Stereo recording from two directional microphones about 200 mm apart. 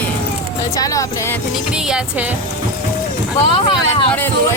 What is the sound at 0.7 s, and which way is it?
Speech, 15° left (ahead or behind).